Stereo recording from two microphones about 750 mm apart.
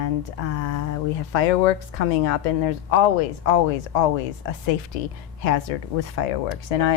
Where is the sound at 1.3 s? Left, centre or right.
Left.